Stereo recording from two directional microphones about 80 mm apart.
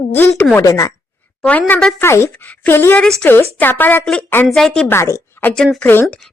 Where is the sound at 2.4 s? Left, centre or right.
Left.